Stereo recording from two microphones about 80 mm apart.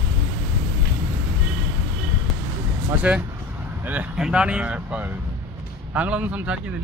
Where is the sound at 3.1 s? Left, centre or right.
Centre.